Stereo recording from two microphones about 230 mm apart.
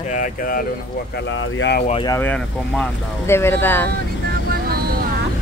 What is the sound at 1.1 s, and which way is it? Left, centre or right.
Speech, left.